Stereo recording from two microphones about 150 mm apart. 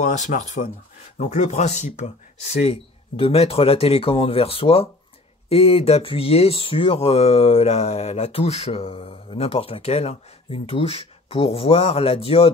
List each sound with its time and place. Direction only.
0.0 s speech: 50° left (ahead or behind)